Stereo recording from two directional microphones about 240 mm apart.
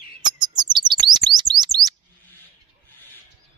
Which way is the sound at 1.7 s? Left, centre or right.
Centre.